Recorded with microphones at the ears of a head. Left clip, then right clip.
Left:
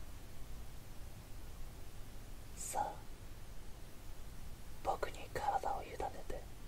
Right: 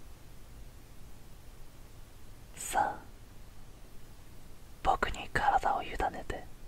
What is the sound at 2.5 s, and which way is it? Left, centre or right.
Whispering, right.